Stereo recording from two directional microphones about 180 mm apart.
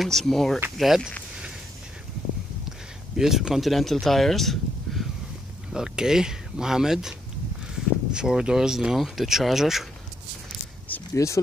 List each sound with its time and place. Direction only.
0.0 s speech: centre (ahead or behind)
3.2 s speech: 5° right (ahead or behind)
10.9 s a sound: 15° left (ahead or behind)